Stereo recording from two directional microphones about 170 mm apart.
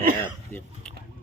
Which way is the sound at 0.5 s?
50° left (ahead or behind).